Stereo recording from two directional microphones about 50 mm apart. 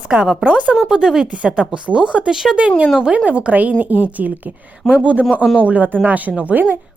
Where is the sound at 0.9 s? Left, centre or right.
Centre.